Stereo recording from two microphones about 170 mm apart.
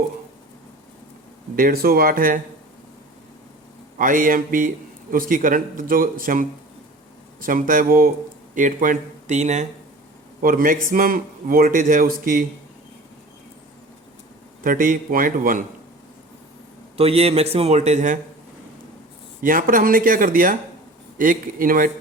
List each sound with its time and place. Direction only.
1.5 s a man's voice: 60° right (ahead or behind)
3.9 s a man's voice: 50° right (ahead or behind)
10.4 s a man's voice: 55° right (ahead or behind)
14.6 s speech: 50° right (ahead or behind)
17.0 s a man's voice: 35° right (ahead or behind)
19.4 s speech: 55° right (ahead or behind)